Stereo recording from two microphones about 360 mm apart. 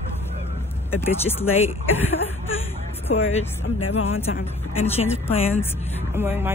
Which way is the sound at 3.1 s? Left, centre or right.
Centre.